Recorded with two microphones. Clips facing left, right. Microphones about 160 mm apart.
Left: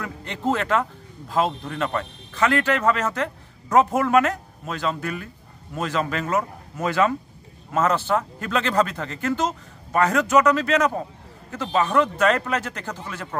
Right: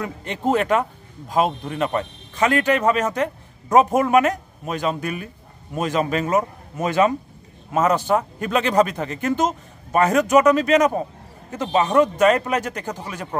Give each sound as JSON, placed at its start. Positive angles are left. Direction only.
{"t": 0.0, "sound": "a man's voice", "side_deg": -15}